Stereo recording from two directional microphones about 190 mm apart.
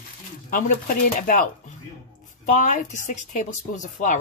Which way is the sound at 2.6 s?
40° left (ahead or behind).